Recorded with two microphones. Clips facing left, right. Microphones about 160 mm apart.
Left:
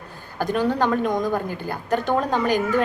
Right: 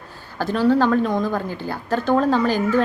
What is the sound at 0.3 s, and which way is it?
A woman's voice, 15° left (ahead or behind).